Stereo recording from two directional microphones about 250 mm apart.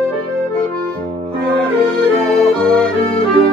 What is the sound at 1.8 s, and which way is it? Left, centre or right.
Music, centre.